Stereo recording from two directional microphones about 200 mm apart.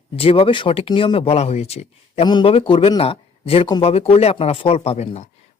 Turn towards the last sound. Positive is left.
turn(degrees=30)  # may be behind; listen again after turning